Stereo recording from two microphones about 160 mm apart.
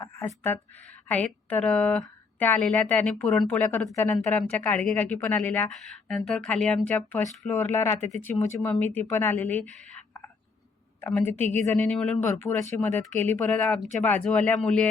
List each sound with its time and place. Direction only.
0.0 s a sound: 20° left (ahead or behind)
1.0 s speech: 10° left (ahead or behind)
11.0 s a woman's voice: 15° left (ahead or behind)
11.3 s a woman's voice: 40° right (ahead or behind)
11.5 s speech: 10° left (ahead or behind)